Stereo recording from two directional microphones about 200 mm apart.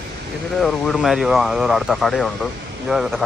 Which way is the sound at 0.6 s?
Centre (ahead or behind).